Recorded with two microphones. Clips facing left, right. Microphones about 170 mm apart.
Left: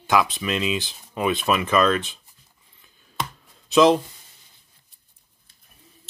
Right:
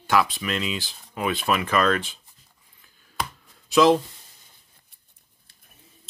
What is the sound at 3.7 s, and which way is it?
Speech, 20° left (ahead or behind).